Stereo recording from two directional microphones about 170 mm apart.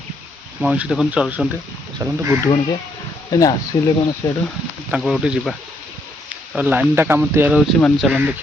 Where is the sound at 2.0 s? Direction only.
20° right (ahead or behind).